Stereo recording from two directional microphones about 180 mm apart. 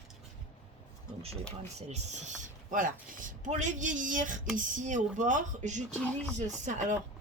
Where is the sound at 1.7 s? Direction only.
40° right (ahead or behind).